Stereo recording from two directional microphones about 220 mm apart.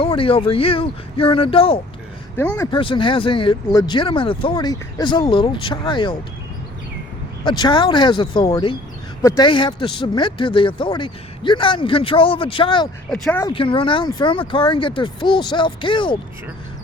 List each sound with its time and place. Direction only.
0.0 s speech: 25° left (ahead or behind)
2.3 s speech: 10° left (ahead or behind)
2.6 s speech: 25° left (ahead or behind)
7.4 s speech: 20° left (ahead or behind)
13.1 s speech: 5° left (ahead or behind)
13.5 s speech: 25° left (ahead or behind)